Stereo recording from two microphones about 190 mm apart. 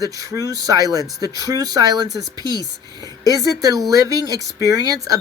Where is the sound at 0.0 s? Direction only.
20° right (ahead or behind).